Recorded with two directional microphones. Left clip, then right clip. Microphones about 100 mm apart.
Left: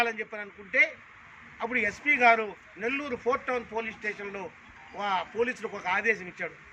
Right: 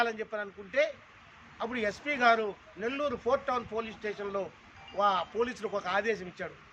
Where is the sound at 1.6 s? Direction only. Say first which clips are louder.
Left 7 dB; 10° right (ahead or behind).